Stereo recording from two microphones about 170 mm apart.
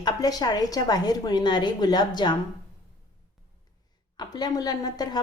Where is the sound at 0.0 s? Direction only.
20° left (ahead or behind).